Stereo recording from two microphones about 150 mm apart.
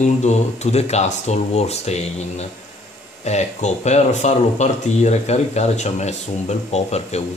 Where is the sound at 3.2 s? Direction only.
50° left (ahead or behind).